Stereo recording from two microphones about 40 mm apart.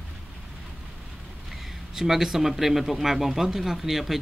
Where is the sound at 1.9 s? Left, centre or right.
Centre.